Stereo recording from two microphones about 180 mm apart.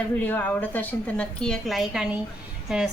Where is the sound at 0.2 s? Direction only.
10° left (ahead or behind).